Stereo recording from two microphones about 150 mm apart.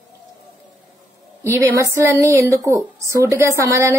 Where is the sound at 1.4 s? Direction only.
20° right (ahead or behind).